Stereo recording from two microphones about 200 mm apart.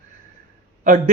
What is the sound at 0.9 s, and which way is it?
Speech, 45° right (ahead or behind).